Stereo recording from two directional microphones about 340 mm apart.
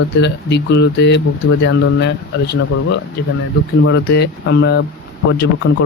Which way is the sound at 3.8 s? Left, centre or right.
Left.